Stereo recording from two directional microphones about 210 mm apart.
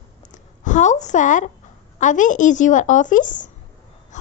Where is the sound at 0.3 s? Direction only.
35° left (ahead or behind).